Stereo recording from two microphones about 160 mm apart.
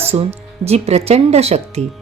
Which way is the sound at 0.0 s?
40° right (ahead or behind).